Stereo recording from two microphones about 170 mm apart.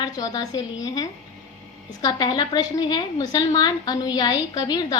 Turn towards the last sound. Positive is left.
turn(degrees=25)  # may be behind; listen again after turning